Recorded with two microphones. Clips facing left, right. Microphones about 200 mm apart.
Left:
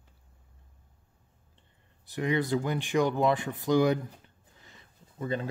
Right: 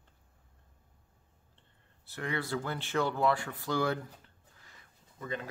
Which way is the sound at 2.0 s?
15° left (ahead or behind).